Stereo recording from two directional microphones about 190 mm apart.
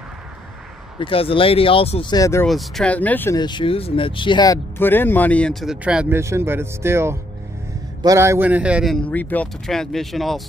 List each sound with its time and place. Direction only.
0.9 s speech: 30° left (ahead or behind)
2.4 s speech: centre (ahead or behind)
3.3 s a man's voice: 25° left (ahead or behind); by 10.4 s centre (ahead or behind)